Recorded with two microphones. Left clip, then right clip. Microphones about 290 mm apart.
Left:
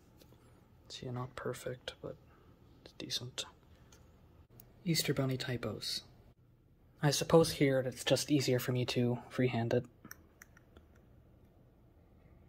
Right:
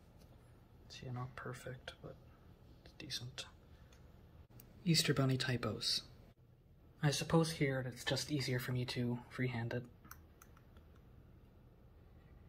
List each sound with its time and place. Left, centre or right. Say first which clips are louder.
0.8 s speech: left 6 dB; left
4.8 s speech: even; centre
7.0 s speech: left 8 dB; centre